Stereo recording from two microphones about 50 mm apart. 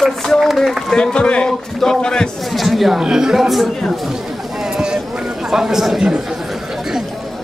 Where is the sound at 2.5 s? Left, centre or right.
Centre.